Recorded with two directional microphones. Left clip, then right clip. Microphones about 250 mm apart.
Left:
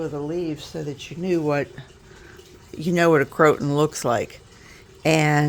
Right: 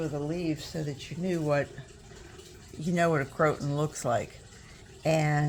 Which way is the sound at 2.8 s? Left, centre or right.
Left.